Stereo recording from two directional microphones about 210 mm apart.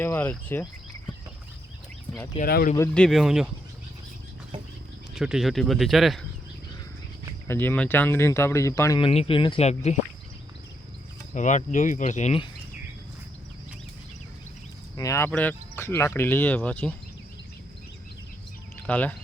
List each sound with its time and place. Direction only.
0.0 s speech: 10° left (ahead or behind)
2.4 s speech: 45° left (ahead or behind)
2.7 s speech: 10° left (ahead or behind)
5.1 s speech: centre (ahead or behind)
7.4 s speech: 10° left (ahead or behind); by 9.9 s 30° left (ahead or behind)
11.3 s speech: 35° left (ahead or behind)
14.9 s speech: 15° left (ahead or behind)
18.8 s speech: 5° left (ahead or behind)